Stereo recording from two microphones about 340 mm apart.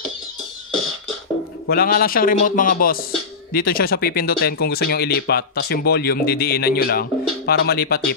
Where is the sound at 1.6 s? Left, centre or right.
Left.